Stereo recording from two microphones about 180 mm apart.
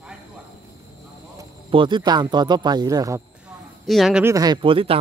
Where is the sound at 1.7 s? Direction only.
30° right (ahead or behind).